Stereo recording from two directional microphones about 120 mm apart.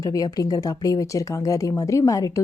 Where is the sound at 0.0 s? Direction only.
30° left (ahead or behind).